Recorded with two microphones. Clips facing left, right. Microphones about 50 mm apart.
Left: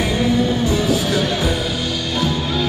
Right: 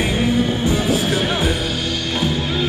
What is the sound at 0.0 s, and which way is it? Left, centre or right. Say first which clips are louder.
Music: left 1 dB; right.